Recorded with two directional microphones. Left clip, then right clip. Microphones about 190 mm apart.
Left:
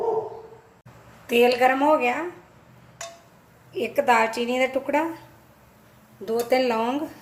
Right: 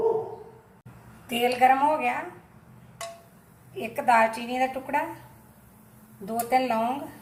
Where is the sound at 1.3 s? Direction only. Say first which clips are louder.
Left 3 dB; 50° left (ahead or behind).